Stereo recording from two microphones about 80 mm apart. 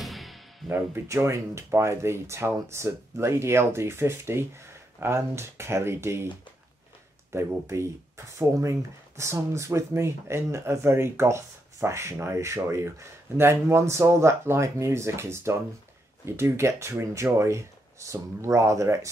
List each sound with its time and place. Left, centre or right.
0.0 s music: centre
0.7 s speech: right
7.3 s speech: right